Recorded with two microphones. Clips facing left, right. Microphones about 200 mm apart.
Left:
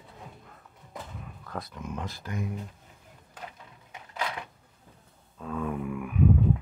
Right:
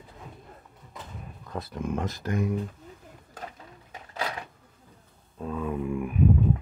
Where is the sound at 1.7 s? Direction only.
50° right (ahead or behind).